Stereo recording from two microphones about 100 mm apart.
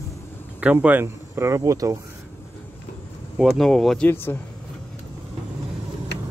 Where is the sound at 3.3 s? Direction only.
Centre (ahead or behind).